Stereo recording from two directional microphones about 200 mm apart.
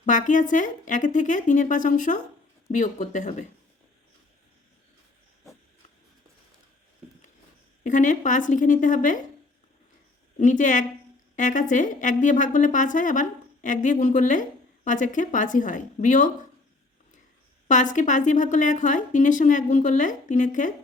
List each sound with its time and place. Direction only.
0.0 s a woman's voice: 40° left (ahead or behind)
7.9 s a woman's voice: 40° left (ahead or behind)
10.3 s a woman's voice: 40° left (ahead or behind)
17.7 s a woman's voice: 40° left (ahead or behind)